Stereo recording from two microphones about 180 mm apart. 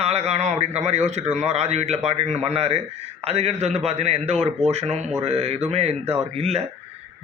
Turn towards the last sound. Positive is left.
turn(degrees=-35)  # may be behind; listen again after turning